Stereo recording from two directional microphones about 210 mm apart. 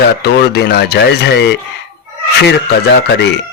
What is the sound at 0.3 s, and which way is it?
Speech, 50° left (ahead or behind).